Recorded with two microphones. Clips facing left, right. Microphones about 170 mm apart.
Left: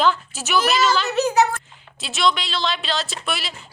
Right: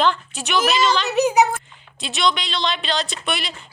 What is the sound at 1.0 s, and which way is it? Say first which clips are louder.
Speech: right 2 dB; 15° right (ahead or behind).